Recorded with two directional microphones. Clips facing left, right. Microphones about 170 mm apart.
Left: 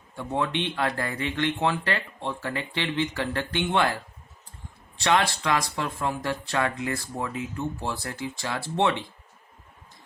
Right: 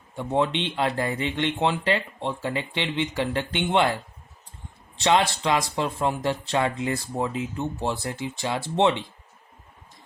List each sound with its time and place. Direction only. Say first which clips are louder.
0.2 s speech: right 3 dB; 20° right (ahead or behind)
4.9 s speech: right 2 dB; 20° right (ahead or behind)